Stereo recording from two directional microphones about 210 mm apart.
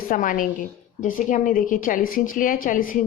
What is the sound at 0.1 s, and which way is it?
A woman's voice, 40° left (ahead or behind).